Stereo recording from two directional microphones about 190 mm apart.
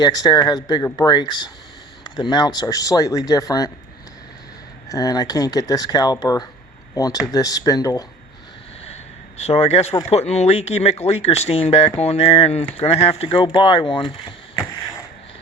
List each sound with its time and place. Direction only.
0.0 s speech: 20° left (ahead or behind)
4.9 s speech: 20° left (ahead or behind)
9.4 s speech: 35° left (ahead or behind)